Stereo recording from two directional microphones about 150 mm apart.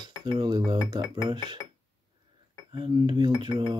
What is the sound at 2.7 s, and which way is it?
Cutlery, 30° right (ahead or behind).